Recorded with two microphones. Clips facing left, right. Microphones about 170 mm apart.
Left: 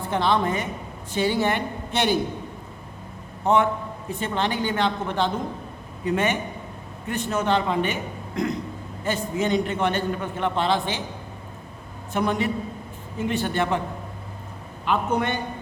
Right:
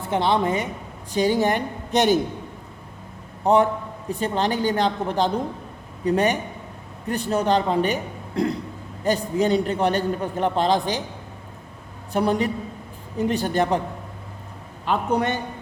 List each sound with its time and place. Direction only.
0.1 s a woman's voice: 25° right (ahead or behind)
1.1 s a man's voice: 40° right (ahead or behind)
3.4 s a man's voice: 35° right (ahead or behind)
12.1 s a man's voice: 35° right (ahead or behind)
14.8 s a man's voice: 40° right (ahead or behind)